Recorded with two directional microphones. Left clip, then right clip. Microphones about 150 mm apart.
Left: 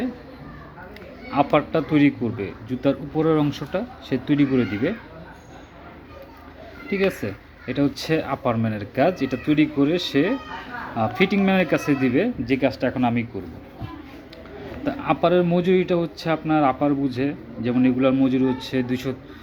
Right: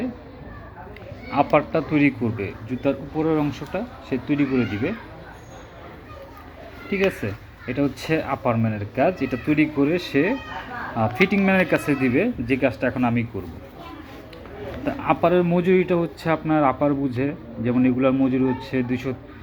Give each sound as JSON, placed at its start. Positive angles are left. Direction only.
{"t": 1.3, "sound": "a man's voice", "side_deg": 20}
{"t": 2.6, "sound": "speech", "side_deg": 35}
{"t": 7.3, "sound": "speech", "side_deg": 15}
{"t": 9.3, "sound": "a man's voice", "side_deg": 10}
{"t": 14.8, "sound": "a man's voice", "side_deg": 10}